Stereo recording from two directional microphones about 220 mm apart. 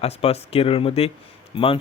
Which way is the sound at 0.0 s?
25° left (ahead or behind).